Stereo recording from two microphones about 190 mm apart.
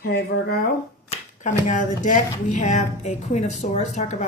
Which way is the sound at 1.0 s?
40° left (ahead or behind).